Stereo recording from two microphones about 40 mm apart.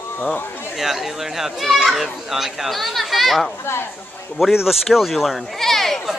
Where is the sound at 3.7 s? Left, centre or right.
Left.